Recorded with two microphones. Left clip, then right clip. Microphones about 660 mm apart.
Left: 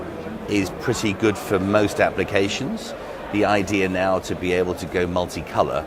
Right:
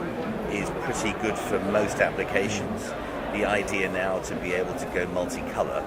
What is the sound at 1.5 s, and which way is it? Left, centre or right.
Speech, left.